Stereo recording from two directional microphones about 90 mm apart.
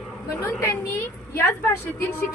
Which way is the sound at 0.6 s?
25° left (ahead or behind).